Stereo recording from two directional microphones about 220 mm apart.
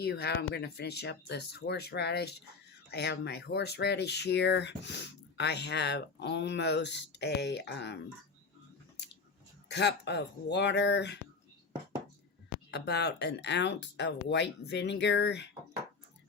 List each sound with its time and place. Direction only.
0.0 s speech: 45° left (ahead or behind)
9.6 s speech: 50° left (ahead or behind)
12.7 s speech: 50° left (ahead or behind)